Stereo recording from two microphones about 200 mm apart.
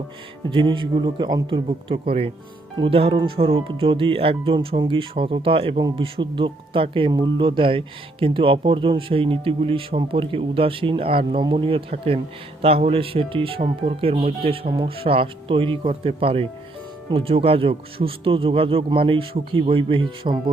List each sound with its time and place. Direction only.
0.5 s speech: 25° right (ahead or behind)